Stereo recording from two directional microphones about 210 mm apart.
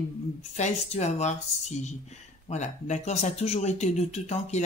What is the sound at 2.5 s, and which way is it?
Speech, 35° left (ahead or behind).